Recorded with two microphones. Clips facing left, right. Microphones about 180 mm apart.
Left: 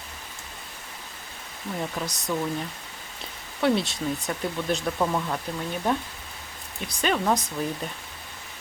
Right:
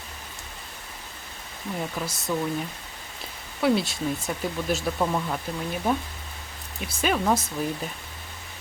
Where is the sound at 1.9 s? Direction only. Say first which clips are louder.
Even; centre (ahead or behind).